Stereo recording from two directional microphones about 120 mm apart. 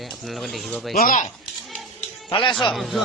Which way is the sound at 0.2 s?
Centre (ahead or behind).